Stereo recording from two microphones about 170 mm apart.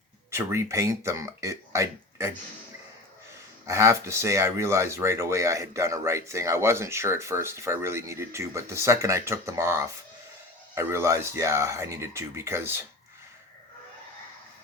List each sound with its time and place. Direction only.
0.3 s speech: 15° right (ahead or behind)
3.7 s speech: 15° right (ahead or behind)